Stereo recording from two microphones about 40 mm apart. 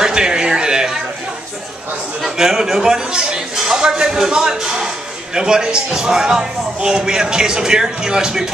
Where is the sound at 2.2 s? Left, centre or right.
Centre.